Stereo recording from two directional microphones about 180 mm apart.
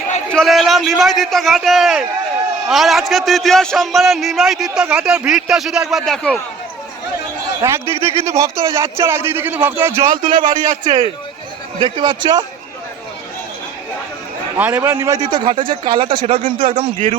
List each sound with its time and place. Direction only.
0.3 s a man's voice: centre (ahead or behind)
7.6 s speech: 15° right (ahead or behind)
10.3 s a man's voice: 45° right (ahead or behind)
11.8 s speech: 25° right (ahead or behind)
14.5 s speech: 10° right (ahead or behind); by 17.2 s 30° right (ahead or behind)